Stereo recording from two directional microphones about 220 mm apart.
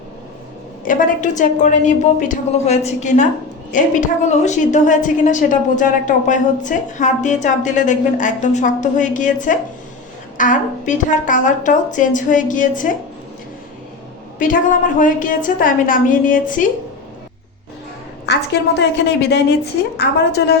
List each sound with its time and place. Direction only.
0.9 s a woman's voice: 35° left (ahead or behind)
14.3 s a woman's voice: 35° left (ahead or behind)
18.3 s speech: 50° left (ahead or behind)